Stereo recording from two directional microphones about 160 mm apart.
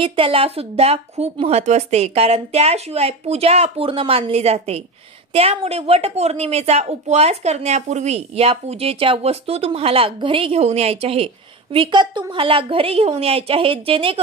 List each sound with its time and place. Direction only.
0.0 s a woman's voice: 35° right (ahead or behind)